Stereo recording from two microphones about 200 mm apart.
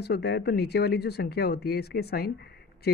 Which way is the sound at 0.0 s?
55° left (ahead or behind).